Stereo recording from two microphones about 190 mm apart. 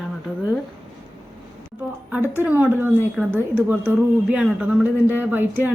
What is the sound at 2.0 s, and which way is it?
Speech, 10° right (ahead or behind).